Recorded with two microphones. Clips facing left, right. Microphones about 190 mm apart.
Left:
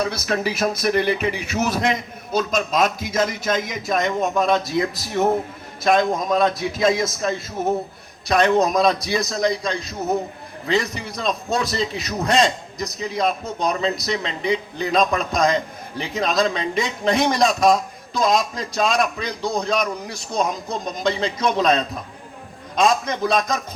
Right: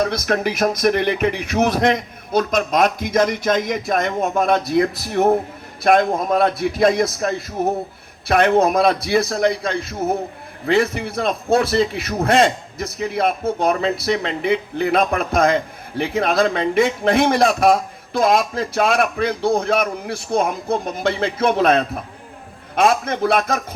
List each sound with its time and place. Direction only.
0.0 s a man's voice: 50° right (ahead or behind)